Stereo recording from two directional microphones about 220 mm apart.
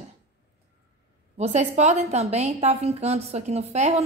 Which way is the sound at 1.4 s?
30° right (ahead or behind).